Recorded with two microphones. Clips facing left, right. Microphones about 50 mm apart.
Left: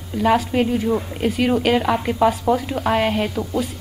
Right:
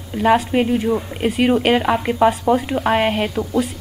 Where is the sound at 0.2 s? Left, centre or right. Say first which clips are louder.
Right 2 dB; right.